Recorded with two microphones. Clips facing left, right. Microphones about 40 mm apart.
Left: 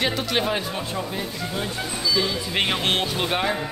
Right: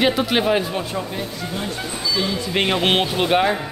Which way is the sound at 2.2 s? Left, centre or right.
Centre.